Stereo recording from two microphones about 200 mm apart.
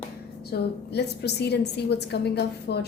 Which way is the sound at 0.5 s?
55° left (ahead or behind).